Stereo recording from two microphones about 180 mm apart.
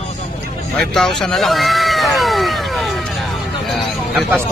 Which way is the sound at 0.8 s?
Centre (ahead or behind).